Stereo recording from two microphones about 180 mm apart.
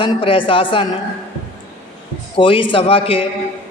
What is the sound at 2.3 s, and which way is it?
Speech, 30° left (ahead or behind).